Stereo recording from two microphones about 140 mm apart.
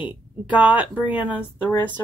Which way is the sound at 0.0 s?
10° right (ahead or behind).